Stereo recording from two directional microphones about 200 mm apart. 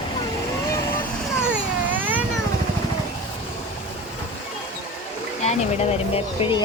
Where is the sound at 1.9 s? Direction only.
10° right (ahead or behind).